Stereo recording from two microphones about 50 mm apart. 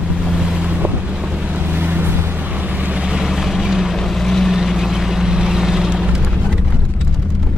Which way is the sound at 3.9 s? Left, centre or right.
Centre.